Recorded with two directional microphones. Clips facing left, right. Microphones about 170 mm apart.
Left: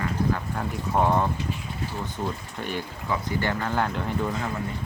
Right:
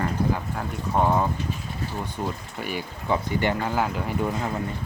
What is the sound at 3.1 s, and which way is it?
Speech, 20° right (ahead or behind).